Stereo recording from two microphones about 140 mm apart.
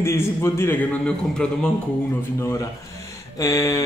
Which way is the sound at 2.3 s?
20° left (ahead or behind).